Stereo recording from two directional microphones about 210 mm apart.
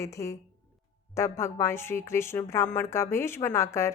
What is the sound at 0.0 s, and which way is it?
Speech, 15° left (ahead or behind).